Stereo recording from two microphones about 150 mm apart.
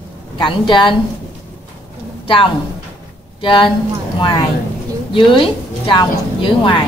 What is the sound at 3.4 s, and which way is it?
Speech, 35° left (ahead or behind).